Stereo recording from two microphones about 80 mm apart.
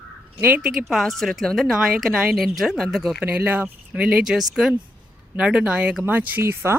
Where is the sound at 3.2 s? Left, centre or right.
Centre.